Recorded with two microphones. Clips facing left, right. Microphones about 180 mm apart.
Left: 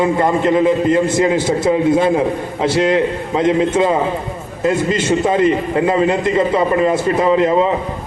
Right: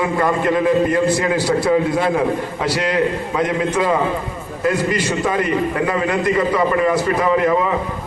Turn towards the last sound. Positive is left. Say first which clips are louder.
# left 3 dB
turn(degrees=25)  # may be behind; listen again after turning